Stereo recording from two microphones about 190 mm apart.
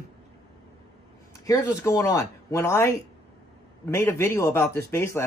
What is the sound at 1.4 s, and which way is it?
A man's voice, 15° left (ahead or behind).